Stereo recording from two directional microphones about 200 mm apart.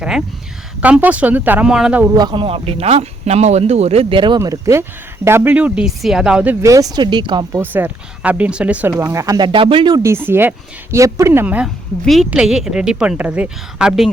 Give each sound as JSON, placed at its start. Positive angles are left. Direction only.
{"t": 0.8, "sound": "speech", "side_deg": -5}
{"t": 2.1, "sound": "speech", "side_deg": -20}
{"t": 7.5, "sound": "a woman's voice", "side_deg": -10}